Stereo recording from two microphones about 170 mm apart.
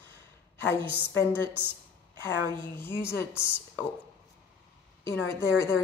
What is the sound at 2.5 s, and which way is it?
A woman's voice, 10° left (ahead or behind).